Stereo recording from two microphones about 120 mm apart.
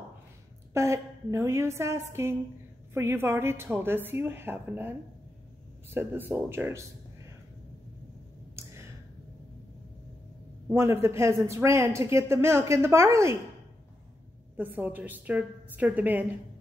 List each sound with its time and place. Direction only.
0.7 s speech: 25° right (ahead or behind)
10.7 s speech: 20° right (ahead or behind)
14.6 s a woman's voice: 15° right (ahead or behind)